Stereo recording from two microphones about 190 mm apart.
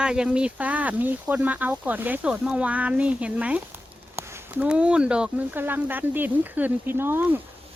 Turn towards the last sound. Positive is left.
turn(degrees=-10)  # may be behind; listen again after turning